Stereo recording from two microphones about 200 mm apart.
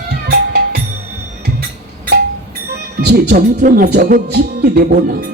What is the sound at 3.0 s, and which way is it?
Speech, 50° right (ahead or behind).